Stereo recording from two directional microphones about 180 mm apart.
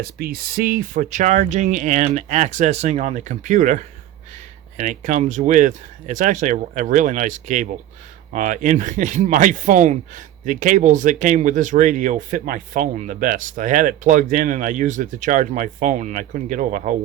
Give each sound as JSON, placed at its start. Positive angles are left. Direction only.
{"t": 0.0, "sound": "speech", "side_deg": -55}